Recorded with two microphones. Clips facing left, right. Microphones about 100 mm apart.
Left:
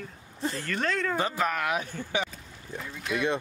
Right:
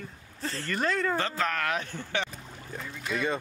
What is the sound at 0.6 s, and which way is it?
Speech, centre (ahead or behind).